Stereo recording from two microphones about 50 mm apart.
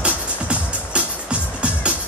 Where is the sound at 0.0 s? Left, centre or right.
Right.